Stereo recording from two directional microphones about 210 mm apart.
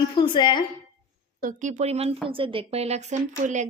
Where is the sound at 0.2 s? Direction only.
20° left (ahead or behind).